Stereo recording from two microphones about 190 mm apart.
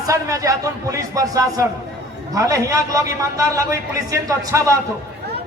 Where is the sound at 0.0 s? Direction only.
15° right (ahead or behind).